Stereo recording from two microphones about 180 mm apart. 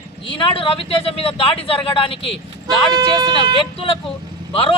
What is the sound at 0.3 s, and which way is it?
Speech, 30° left (ahead or behind).